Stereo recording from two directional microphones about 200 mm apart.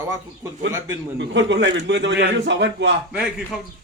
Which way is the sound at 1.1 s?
60° right (ahead or behind).